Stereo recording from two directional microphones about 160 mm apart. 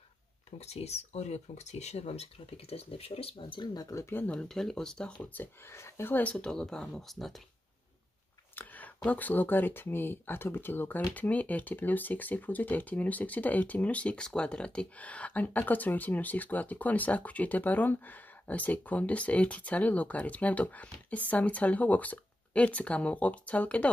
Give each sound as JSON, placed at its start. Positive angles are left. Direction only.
{"t": 0.5, "sound": "speech", "side_deg": 40}
{"t": 8.5, "sound": "speech", "side_deg": 10}